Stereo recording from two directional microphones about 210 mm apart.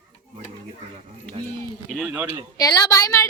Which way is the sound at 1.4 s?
25° right (ahead or behind).